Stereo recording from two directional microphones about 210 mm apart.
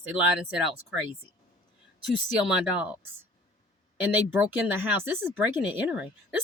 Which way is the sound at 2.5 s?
5° right (ahead or behind).